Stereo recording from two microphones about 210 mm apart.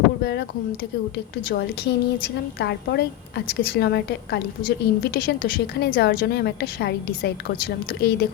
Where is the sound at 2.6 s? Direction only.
50° left (ahead or behind).